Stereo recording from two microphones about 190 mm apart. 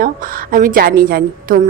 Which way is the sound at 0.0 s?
45° right (ahead or behind).